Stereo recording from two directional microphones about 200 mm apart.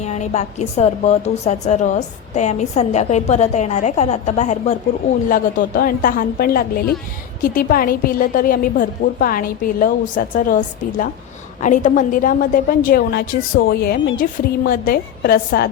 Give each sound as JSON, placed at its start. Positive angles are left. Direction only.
{"t": 0.0, "sound": "a woman's voice", "side_deg": 35}
{"t": 5.3, "sound": "a woman's voice", "side_deg": 45}